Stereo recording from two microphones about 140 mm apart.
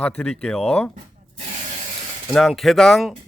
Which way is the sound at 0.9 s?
55° right (ahead or behind).